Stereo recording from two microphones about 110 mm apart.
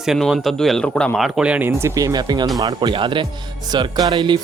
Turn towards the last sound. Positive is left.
turn(degrees=-45)  # may be behind; listen again after turning